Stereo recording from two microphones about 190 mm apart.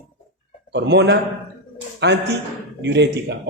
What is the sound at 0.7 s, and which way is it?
A man's voice, 65° right (ahead or behind).